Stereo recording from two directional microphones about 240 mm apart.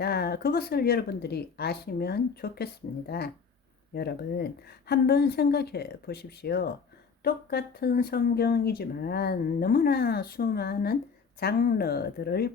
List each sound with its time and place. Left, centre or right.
0.0 s speech: left